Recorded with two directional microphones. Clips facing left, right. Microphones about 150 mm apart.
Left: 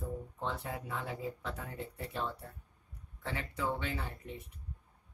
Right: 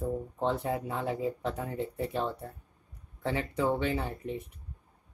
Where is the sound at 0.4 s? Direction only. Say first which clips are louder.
Right 10 dB; 25° right (ahead or behind).